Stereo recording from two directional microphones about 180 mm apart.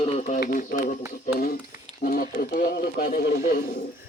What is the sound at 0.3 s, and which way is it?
Speech, 50° left (ahead or behind).